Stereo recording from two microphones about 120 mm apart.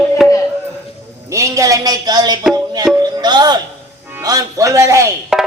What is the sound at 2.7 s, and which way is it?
Music, 35° right (ahead or behind).